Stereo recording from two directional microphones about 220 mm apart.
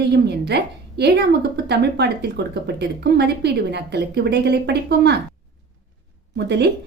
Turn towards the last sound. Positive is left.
turn(degrees=-50)  # may be behind; listen again after turning